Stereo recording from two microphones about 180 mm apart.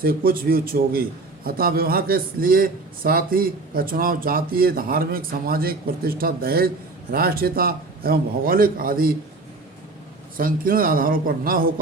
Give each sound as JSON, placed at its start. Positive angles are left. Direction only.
{"t": 0.0, "sound": "a man's voice", "side_deg": -55}
{"t": 10.3, "sound": "a man's voice", "side_deg": -50}